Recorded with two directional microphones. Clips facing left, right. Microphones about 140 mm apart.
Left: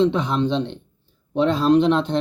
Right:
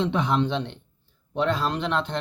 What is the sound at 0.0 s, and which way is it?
Speech, 20° left (ahead or behind).